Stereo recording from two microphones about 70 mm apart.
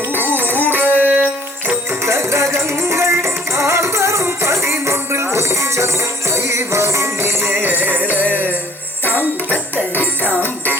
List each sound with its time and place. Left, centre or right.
0.2 s music: right
2.0 s music: right
7.5 s music: right
9.0 s music: left